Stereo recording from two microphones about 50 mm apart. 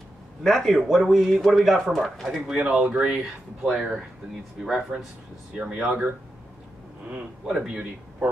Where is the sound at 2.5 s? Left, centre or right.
Centre.